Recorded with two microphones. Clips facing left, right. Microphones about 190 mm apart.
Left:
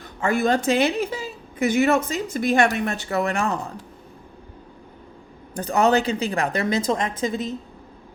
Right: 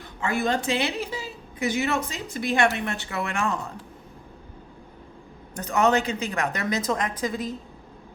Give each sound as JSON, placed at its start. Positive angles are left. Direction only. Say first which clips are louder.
{"t": 0.2, "sound": "a woman's voice", "louder": "left 5 dB", "side_deg": 45}
{"t": 5.5, "sound": "a woman's voice", "louder": "left 3 dB", "side_deg": 35}